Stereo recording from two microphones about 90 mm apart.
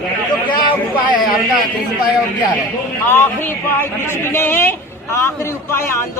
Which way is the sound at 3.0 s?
25° left (ahead or behind).